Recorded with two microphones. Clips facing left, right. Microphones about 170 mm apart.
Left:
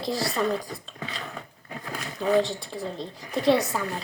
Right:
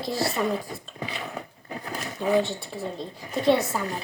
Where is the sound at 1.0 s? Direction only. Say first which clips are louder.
Right 4 dB; 15° right (ahead or behind).